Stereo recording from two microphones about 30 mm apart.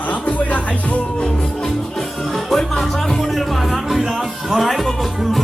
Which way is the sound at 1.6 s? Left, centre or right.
Centre.